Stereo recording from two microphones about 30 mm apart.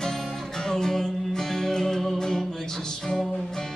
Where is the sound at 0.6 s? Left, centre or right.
Centre.